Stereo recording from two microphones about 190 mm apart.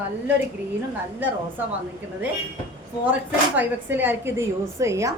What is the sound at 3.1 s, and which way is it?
Speech, 10° right (ahead or behind).